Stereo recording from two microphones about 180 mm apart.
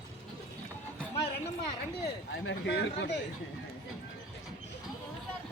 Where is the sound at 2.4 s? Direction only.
80° left.